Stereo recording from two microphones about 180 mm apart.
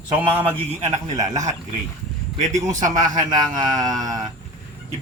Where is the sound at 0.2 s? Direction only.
10° right (ahead or behind).